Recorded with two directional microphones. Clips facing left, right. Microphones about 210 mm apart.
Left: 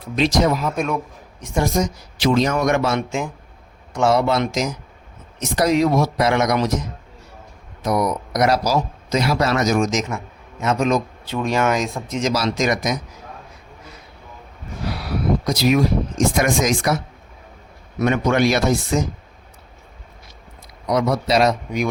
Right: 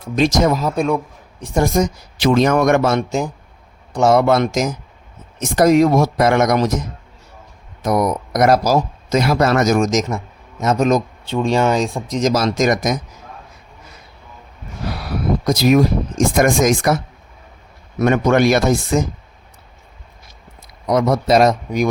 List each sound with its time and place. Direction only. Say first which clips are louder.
0.0 s speech: right 3 dB; 45° right (ahead or behind)
1.6 s speech: right 4 dB; 50° right (ahead or behind)
7.9 s speech: right 3 dB; 50° right (ahead or behind)
11.3 s speech: right 4 dB; 30° right (ahead or behind); by 13.0 s 45° right (ahead or behind)
15.0 s speech: right 2 dB; 45° right (ahead or behind)
18.0 s speech: right 4 dB; 45° right (ahead or behind)
20.8 s speech: right 3 dB; 45° right (ahead or behind)